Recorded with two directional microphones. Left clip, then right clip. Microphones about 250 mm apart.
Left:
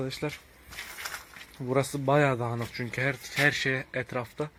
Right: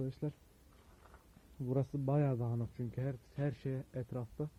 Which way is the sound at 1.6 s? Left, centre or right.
Centre.